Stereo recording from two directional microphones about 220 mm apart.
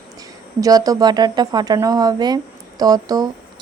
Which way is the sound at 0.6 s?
15° right (ahead or behind).